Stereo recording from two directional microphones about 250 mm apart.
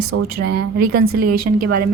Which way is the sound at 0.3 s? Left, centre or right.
Right.